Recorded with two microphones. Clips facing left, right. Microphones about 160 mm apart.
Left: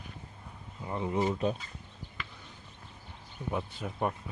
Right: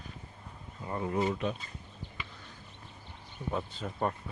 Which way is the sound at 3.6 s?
5° left (ahead or behind).